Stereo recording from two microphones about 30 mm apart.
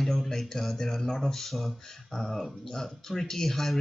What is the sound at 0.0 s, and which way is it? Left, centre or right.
Speech, centre.